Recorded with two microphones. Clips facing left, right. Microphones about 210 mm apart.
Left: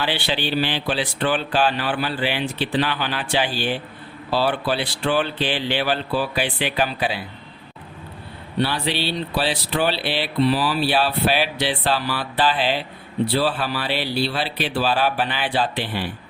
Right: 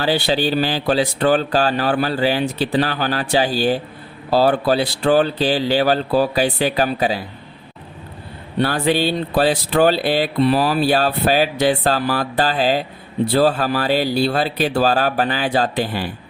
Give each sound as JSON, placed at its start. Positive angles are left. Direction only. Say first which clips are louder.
{"t": 0.0, "sound": "speech", "louder": "right 6 dB", "side_deg": -40}
{"t": 8.5, "sound": "speech", "louder": "right 5 dB", "side_deg": -45}